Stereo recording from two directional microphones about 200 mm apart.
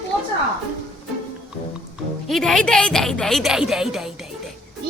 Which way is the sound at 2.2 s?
Centre (ahead or behind).